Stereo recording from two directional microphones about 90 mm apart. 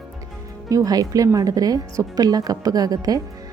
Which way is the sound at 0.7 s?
40° right (ahead or behind).